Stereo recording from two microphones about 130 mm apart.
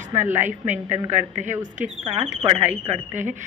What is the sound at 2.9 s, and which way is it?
Speech, 60° right (ahead or behind).